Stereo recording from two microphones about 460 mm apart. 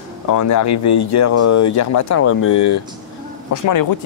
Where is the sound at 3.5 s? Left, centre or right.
Left.